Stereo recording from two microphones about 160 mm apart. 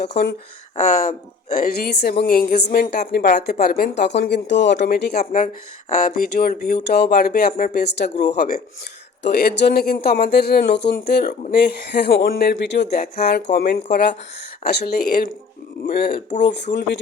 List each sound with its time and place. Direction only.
0.1 s speech: 90° left
0.8 s speech: 55° left (ahead or behind); by 15.3 s 70° left (ahead or behind)
15.9 s speech: 85° left